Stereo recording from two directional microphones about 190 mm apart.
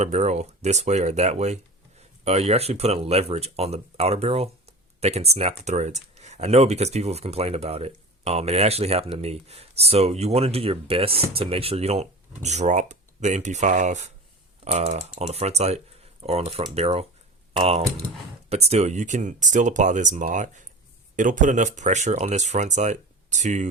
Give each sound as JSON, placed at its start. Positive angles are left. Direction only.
{"t": 0.0, "sound": "speech", "side_deg": -35}